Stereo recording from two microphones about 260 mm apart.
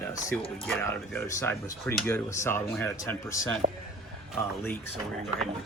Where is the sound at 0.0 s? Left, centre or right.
Centre.